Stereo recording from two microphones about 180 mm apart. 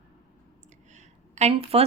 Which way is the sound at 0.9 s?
40° right (ahead or behind).